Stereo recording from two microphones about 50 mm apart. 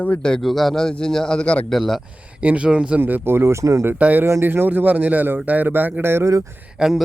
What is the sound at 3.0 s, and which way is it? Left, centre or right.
Speech, right.